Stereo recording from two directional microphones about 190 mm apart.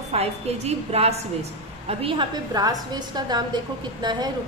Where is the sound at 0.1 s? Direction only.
35° right (ahead or behind).